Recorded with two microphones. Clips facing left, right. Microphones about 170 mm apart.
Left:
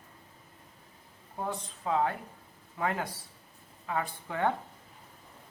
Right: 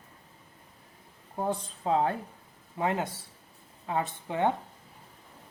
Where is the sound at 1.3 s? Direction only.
30° right (ahead or behind).